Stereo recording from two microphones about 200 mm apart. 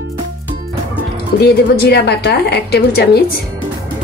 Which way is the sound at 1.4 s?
55° left (ahead or behind).